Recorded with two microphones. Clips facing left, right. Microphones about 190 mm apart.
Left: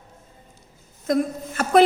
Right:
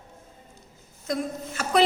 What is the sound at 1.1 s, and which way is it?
Speech, 50° left (ahead or behind).